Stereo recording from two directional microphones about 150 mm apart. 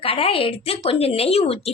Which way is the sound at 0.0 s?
40° left (ahead or behind).